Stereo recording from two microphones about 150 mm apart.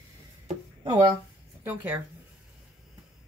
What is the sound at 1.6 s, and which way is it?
Speech, 15° right (ahead or behind).